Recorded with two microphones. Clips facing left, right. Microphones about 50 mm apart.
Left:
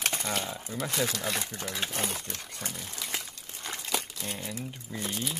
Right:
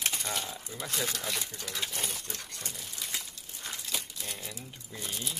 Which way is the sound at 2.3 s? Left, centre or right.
Left.